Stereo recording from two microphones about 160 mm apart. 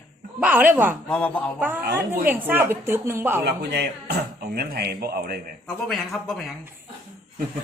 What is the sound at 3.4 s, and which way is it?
Speech, 90° right.